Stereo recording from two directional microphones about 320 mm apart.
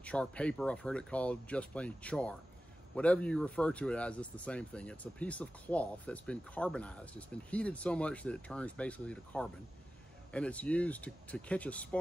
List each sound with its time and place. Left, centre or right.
0.0 s speech: centre